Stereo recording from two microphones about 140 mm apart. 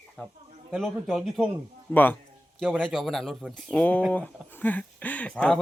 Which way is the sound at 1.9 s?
15° left (ahead or behind).